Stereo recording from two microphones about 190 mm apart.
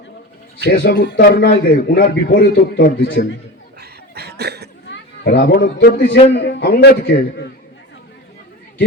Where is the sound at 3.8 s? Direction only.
60° right (ahead or behind).